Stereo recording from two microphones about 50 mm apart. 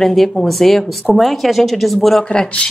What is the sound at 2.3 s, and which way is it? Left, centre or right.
Speech, centre.